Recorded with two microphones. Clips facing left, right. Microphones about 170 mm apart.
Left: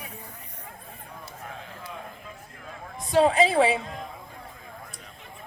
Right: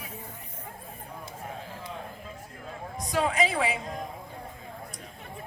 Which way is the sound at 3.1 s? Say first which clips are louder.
Left 7 dB; 30° left (ahead or behind).